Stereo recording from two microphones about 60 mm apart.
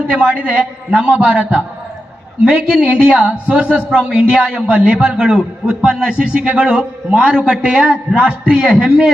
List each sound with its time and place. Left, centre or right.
0.1 s a man's voice: right